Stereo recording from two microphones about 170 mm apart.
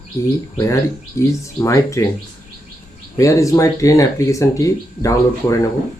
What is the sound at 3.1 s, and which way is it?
Speech, 20° left (ahead or behind).